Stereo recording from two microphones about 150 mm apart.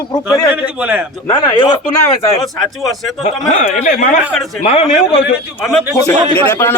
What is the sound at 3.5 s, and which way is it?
Speech, 55° left (ahead or behind).